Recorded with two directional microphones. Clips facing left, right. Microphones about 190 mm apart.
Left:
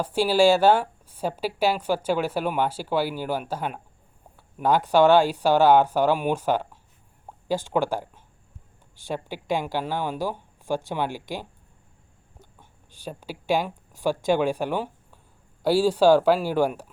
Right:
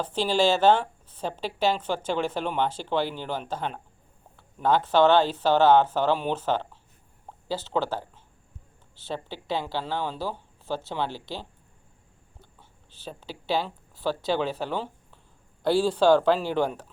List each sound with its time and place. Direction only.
0.0 s speech: 10° left (ahead or behind)
12.5 s speech: 15° left (ahead or behind)